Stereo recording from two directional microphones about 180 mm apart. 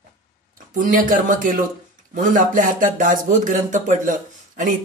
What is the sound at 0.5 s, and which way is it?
Speech, 50° right (ahead or behind).